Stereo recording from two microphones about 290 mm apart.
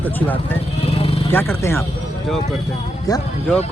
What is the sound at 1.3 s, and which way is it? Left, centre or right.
Speech, centre.